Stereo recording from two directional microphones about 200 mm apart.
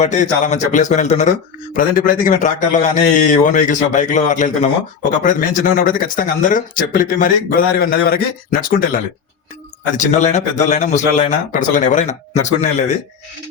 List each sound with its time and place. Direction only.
0.0 s a man's voice: 35° left (ahead or behind)